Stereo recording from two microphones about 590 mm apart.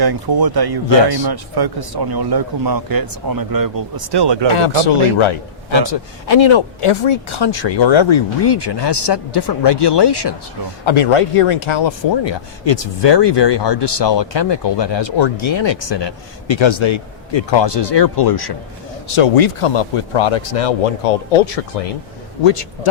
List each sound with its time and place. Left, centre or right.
0.0 s a man's voice: right
4.5 s speech: left
10.8 s speech: left
19.0 s speech: left
22.4 s speech: left